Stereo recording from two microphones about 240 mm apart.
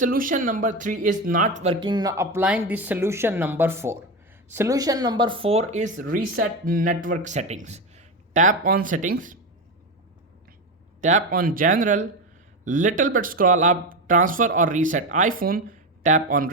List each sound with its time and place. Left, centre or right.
0.0 s speech: right
11.0 s speech: right